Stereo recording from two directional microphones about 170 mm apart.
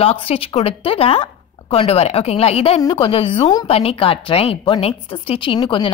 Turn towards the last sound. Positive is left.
turn(degrees=30)  # may be behind; listen again after turning